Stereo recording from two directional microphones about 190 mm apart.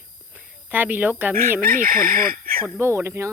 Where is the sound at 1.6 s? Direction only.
50° right (ahead or behind).